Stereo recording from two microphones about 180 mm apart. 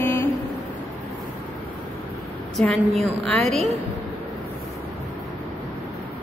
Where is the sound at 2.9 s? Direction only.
35° right (ahead or behind).